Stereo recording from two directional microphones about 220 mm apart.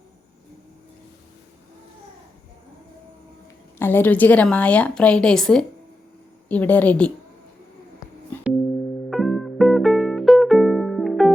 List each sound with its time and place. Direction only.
3.8 s a woman's voice: 10° left (ahead or behind)
9.0 s music: centre (ahead or behind)